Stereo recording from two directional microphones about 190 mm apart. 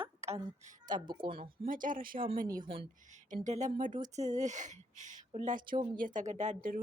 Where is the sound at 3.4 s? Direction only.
40° right (ahead or behind).